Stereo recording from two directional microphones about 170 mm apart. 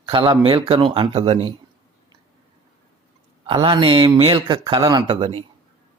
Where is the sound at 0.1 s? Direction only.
30° right (ahead or behind).